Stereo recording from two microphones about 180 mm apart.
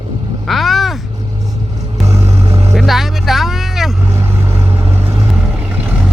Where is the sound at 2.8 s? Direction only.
Centre (ahead or behind).